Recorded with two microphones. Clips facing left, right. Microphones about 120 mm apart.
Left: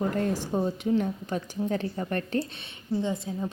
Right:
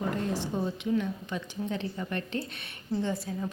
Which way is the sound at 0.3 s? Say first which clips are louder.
Left 3 dB; 35° left (ahead or behind).